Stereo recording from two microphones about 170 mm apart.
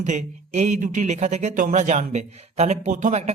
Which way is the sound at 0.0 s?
45° right (ahead or behind).